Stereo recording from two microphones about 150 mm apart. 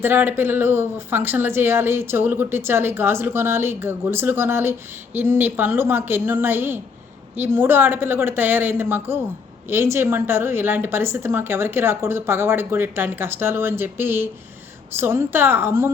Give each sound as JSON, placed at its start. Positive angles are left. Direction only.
{"t": 0.0, "sound": "speech", "side_deg": -15}